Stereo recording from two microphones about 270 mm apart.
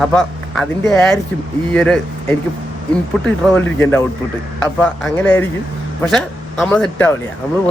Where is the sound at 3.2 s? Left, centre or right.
Centre.